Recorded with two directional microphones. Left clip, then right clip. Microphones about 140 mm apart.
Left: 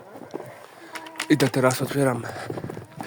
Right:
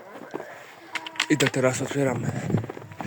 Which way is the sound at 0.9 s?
25° left (ahead or behind).